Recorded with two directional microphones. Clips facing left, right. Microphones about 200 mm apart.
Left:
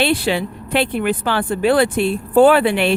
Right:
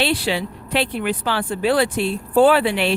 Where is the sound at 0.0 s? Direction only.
55° left (ahead or behind).